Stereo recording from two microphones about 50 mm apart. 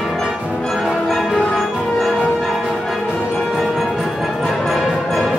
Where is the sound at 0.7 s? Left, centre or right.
Centre.